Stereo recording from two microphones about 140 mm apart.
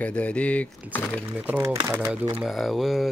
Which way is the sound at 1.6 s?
20° right (ahead or behind).